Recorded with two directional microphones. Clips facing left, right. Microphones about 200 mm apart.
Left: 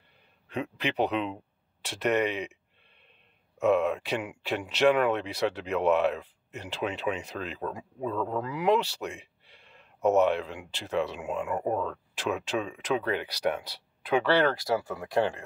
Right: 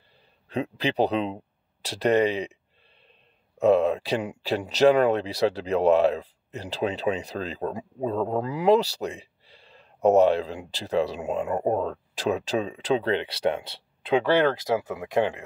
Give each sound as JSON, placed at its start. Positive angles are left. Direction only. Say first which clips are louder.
{"t": 0.5, "sound": "speech", "louder": "right 5 dB", "side_deg": -35}
{"t": 3.5, "sound": "speech", "louder": "right 4 dB", "side_deg": -35}